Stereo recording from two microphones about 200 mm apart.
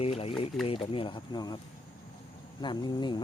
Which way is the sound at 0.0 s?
30° left (ahead or behind).